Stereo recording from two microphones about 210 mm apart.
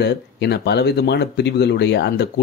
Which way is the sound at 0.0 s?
55° left (ahead or behind).